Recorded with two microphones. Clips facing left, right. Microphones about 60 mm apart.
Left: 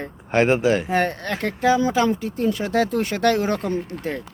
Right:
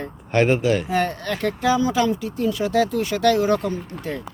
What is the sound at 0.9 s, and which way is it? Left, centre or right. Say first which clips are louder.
Speech: left 1 dB; left.